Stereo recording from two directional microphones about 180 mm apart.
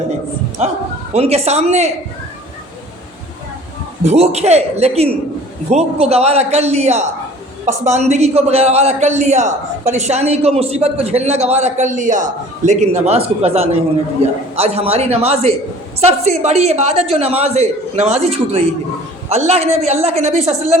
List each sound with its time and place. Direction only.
0.6 s a man's voice: 40° right (ahead or behind)
4.0 s a man's voice: 35° right (ahead or behind)